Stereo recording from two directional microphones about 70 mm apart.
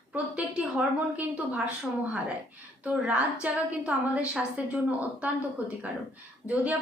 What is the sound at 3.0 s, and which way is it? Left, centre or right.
A woman's voice, centre.